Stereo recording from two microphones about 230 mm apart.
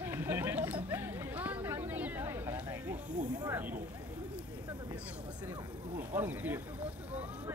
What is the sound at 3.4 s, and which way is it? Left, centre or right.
Vehicle, centre.